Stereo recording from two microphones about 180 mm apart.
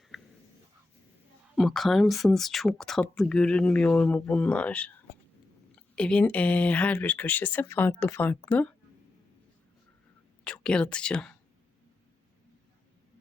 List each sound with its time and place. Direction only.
0.1 s a sound: centre (ahead or behind)
1.5 s speech: centre (ahead or behind)
6.0 s speech: 5° left (ahead or behind)
10.4 s speech: 5° left (ahead or behind)